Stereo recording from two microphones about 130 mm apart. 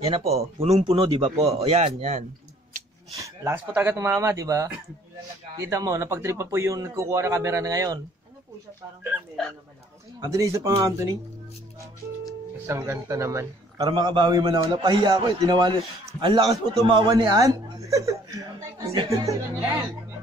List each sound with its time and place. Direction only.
0.0 s speech: 50° right (ahead or behind)
1.0 s a man's voice: 40° right (ahead or behind)
1.4 s speech: 50° right (ahead or behind)
3.2 s speech: 15° right (ahead or behind)
10.2 s speech: 25° right (ahead or behind)
12.6 s speech: 20° right (ahead or behind)
13.8 s a man's voice: 35° right (ahead or behind)
17.2 s speech: 30° right (ahead or behind)
18.9 s a man's voice: 40° right (ahead or behind)